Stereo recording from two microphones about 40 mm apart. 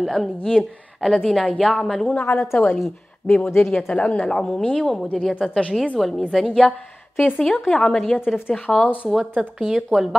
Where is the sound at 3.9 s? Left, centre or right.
Left.